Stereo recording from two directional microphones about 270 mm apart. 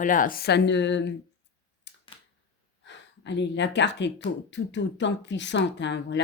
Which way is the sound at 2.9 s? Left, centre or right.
Left.